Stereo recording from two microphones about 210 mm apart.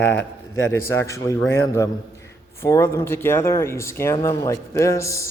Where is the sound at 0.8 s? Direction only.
10° left (ahead or behind).